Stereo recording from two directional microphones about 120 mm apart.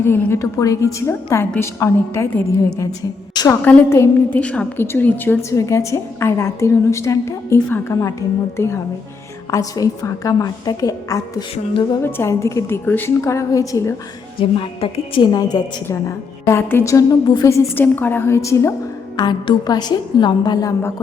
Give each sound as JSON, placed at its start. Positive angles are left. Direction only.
{"t": 0.0, "sound": "a woman's voice", "side_deg": 20}
{"t": 3.3, "sound": "a woman's voice", "side_deg": 30}
{"t": 3.6, "sound": "a woman's voice", "side_deg": 20}
{"t": 4.4, "sound": "a woman's voice", "side_deg": 10}
{"t": 12.0, "sound": "a woman's voice", "side_deg": 20}
{"t": 13.2, "sound": "a woman's voice", "side_deg": 25}
{"t": 14.3, "sound": "a woman's voice", "side_deg": 50}
{"t": 15.3, "sound": "a woman's voice", "side_deg": 35}
{"t": 15.9, "sound": "a woman's voice", "side_deg": 20}
{"t": 19.1, "sound": "a woman's voice", "side_deg": 40}